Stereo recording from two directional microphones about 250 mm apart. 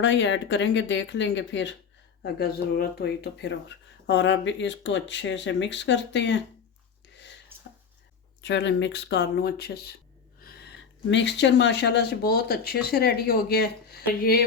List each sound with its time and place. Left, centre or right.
0.0 s speech: left
7.1 s a sound: left
8.4 s speech: left